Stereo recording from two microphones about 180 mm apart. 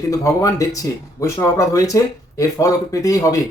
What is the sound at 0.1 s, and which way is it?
Speech, 20° left (ahead or behind).